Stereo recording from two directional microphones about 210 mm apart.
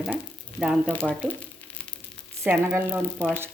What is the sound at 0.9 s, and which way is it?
Speech, 5° left (ahead or behind).